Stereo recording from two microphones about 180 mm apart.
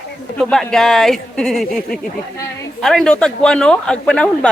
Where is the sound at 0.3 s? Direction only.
5° left (ahead or behind).